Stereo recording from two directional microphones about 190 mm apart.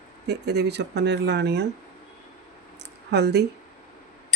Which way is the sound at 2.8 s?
60° right (ahead or behind).